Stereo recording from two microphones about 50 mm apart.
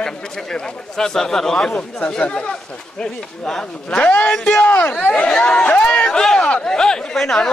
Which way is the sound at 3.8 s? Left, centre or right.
Left.